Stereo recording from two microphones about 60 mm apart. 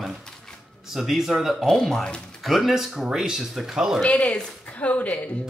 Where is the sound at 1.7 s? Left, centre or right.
Centre.